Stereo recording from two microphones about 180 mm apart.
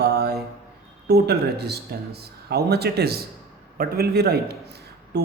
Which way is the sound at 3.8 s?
55° right (ahead or behind).